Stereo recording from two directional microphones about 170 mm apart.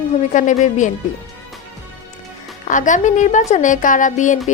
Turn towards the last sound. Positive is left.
turn(degrees=45)  # may be behind; listen again after turning